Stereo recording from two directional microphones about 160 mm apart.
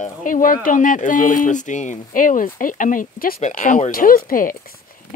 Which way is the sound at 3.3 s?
50° left (ahead or behind).